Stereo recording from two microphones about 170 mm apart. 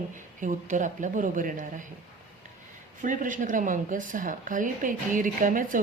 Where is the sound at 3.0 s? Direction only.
50° right (ahead or behind).